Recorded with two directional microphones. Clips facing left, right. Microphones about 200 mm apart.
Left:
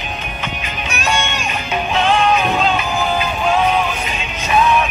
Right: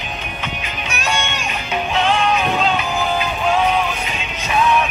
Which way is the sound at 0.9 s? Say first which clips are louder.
Left 3 dB; 45° left (ahead or behind).